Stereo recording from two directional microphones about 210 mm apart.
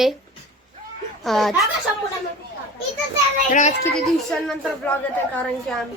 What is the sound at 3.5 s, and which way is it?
Speech, 35° left (ahead or behind).